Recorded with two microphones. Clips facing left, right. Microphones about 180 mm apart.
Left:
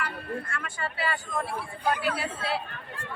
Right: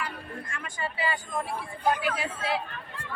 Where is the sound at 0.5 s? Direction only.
15° right (ahead or behind).